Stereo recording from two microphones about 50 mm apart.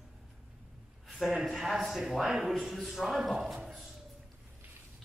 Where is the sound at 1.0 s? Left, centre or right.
Centre.